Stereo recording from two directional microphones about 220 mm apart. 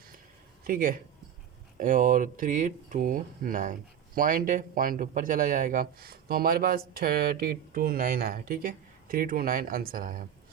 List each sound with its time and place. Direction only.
0.7 s speech: 40° right (ahead or behind)